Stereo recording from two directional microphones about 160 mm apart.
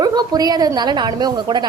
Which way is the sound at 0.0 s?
25° right (ahead or behind).